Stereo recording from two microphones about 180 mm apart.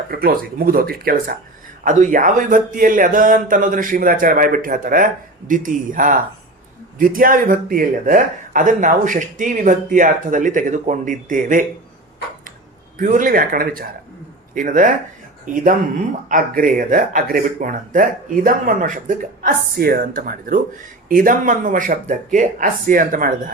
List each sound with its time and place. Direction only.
0.1 s speech: 55° right (ahead or behind)
13.0 s speech: 50° right (ahead or behind)
16.3 s speech: 50° right (ahead or behind)